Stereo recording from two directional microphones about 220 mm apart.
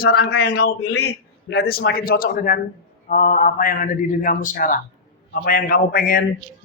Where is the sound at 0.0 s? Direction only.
45° left (ahead or behind).